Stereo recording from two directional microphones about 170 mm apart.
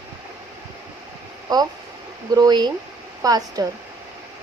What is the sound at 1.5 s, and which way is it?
Speech, 25° right (ahead or behind).